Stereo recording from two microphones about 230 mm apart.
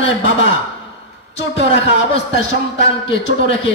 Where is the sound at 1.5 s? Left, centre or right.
Left.